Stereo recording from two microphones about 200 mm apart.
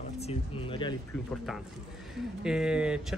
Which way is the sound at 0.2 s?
30° left (ahead or behind).